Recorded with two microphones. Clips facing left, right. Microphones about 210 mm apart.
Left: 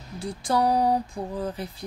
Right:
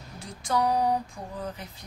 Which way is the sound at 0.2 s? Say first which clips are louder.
Left 3 dB; 35° left (ahead or behind).